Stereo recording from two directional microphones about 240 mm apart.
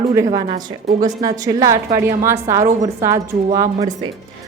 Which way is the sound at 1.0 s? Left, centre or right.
Centre.